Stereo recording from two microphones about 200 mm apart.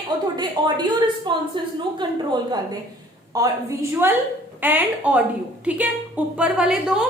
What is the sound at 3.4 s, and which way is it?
A woman's voice, 20° right (ahead or behind).